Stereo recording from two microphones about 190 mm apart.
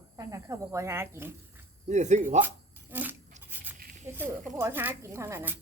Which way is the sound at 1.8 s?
40° right (ahead or behind).